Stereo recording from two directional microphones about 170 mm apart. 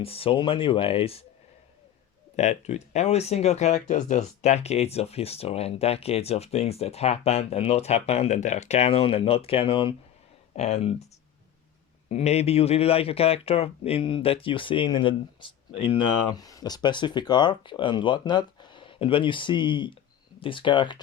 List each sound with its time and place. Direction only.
0.0 s speech: 35° left (ahead or behind)
2.3 s speech: 40° left (ahead or behind)
12.0 s speech: 40° left (ahead or behind)